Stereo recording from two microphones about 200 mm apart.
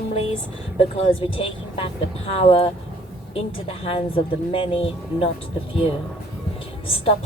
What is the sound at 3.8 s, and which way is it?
A woman's voice, 30° left (ahead or behind).